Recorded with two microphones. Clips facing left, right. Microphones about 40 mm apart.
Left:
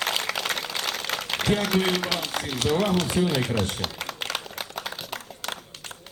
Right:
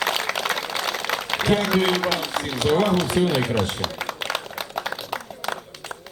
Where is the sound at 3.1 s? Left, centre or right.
Right.